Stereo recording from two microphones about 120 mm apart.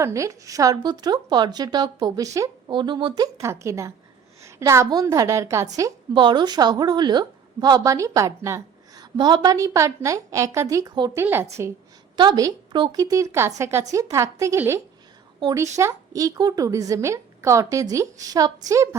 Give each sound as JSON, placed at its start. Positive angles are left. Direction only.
{"t": 0.0, "sound": "a woman's voice", "side_deg": -25}
{"t": 2.6, "sound": "a woman's voice", "side_deg": -40}
{"t": 3.4, "sound": "a woman's voice", "side_deg": -25}
{"t": 6.1, "sound": "a woman's voice", "side_deg": -40}
{"t": 9.1, "sound": "a woman's voice", "side_deg": -40}
{"t": 12.1, "sound": "a woman's voice", "side_deg": -40}
{"t": 15.8, "sound": "a woman's voice", "side_deg": -25}